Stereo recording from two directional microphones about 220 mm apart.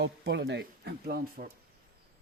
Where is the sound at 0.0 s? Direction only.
50° right (ahead or behind).